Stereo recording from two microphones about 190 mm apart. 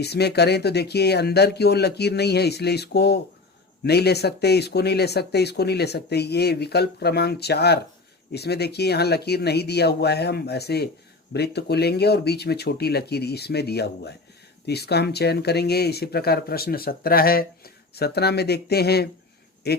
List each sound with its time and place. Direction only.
0.0 s speech: 60° left (ahead or behind)